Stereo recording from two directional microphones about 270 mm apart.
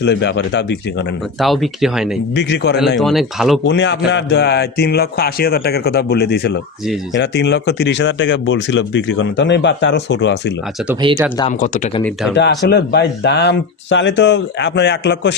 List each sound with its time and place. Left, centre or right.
0.0 s speech: left
1.4 s speech: centre
2.3 s speech: left
3.0 s speech: centre
3.7 s speech: left
11.1 s speech: centre
11.6 s speech: left
12.6 s speech: left